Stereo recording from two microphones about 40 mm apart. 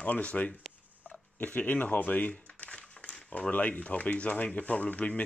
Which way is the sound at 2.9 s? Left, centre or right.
Left.